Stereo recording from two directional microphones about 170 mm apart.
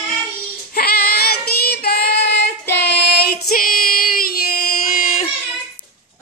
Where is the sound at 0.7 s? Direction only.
65° left (ahead or behind).